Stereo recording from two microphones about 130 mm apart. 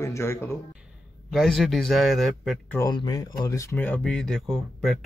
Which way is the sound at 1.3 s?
Centre (ahead or behind).